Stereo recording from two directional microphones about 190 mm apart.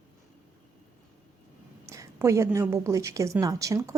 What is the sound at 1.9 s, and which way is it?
A woman's voice, 15° right (ahead or behind).